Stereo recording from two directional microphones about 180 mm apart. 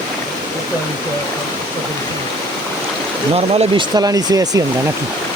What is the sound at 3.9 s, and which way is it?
Speech, 20° right (ahead or behind).